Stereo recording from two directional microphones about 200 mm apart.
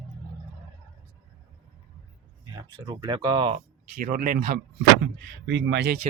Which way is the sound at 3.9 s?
45° right (ahead or behind).